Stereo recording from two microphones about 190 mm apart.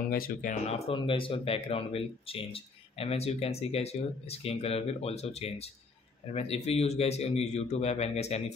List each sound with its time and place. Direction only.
0.1 s speech: 45° left (ahead or behind)